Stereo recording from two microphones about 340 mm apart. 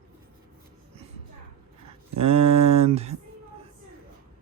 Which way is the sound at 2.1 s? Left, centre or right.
Centre.